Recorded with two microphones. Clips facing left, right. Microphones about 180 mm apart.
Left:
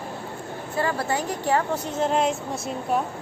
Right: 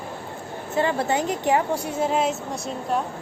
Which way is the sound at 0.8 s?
20° right (ahead or behind).